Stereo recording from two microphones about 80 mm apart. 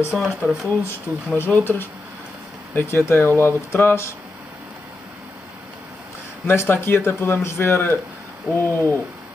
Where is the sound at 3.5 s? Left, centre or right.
Left.